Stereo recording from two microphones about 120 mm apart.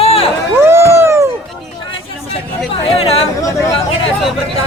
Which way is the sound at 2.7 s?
50° left (ahead or behind).